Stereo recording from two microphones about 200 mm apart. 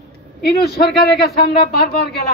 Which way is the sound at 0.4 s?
50° left (ahead or behind).